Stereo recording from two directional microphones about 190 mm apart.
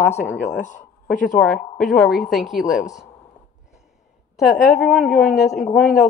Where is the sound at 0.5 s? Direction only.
40° left (ahead or behind).